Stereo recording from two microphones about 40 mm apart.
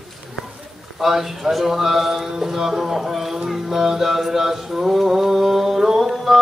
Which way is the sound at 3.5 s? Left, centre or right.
Centre.